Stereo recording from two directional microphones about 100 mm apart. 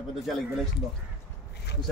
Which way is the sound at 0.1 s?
Centre (ahead or behind).